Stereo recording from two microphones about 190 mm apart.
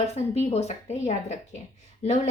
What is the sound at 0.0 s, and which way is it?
A woman's voice, 35° left (ahead or behind).